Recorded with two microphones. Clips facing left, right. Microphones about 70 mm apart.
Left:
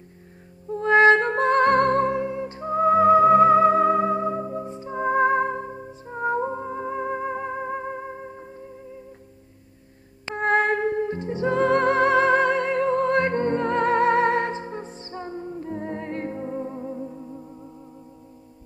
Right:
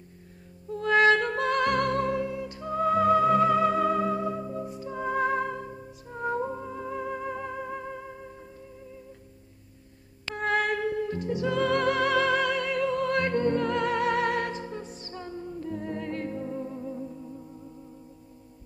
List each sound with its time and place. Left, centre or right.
0.7 s music: left
10.2 s music: left